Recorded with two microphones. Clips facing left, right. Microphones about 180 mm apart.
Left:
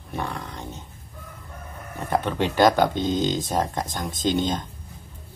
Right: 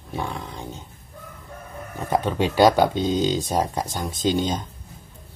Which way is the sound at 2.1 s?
15° right (ahead or behind).